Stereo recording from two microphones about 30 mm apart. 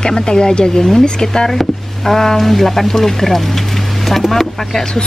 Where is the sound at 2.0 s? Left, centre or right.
Centre.